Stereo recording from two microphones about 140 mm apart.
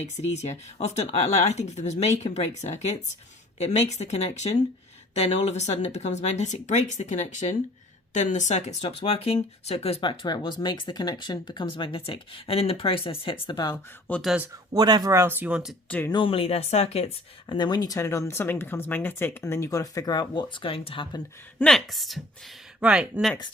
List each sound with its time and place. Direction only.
0.3 s speech: 50° left (ahead or behind); by 13.7 s 30° left (ahead or behind)
14.1 s a woman's voice: centre (ahead or behind)
14.7 s speech: 30° right (ahead or behind)
15.1 s speech: 15° right (ahead or behind)
15.9 s speech: 10° left (ahead or behind)
16.1 s speech: 40° left (ahead or behind)
17.5 s speech: 30° left (ahead or behind)
21.6 s a woman's voice: 5° left (ahead or behind)